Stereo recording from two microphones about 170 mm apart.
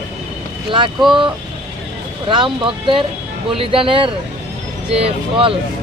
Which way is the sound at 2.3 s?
30° right (ahead or behind).